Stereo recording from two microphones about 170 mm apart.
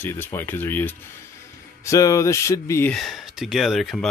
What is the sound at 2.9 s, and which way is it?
Speech, centre (ahead or behind).